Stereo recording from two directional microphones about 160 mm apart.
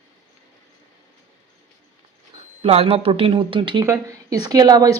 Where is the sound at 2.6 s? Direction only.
40° right (ahead or behind).